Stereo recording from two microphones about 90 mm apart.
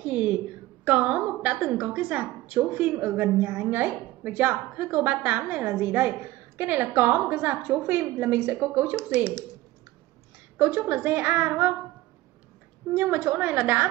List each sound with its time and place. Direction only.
0.0 s a sound: 15° right (ahead or behind)
0.8 s a woman's voice: 15° right (ahead or behind)
10.6 s a woman's voice: 20° right (ahead or behind)
12.9 s a woman's voice: 15° right (ahead or behind)